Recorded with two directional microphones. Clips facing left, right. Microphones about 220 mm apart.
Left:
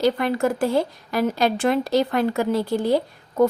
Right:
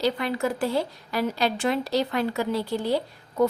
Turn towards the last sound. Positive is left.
turn(degrees=50)  # may be behind; listen again after turning